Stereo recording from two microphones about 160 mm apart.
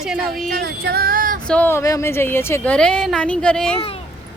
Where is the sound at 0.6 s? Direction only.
80° right; by 1.4 s 60° right (ahead or behind).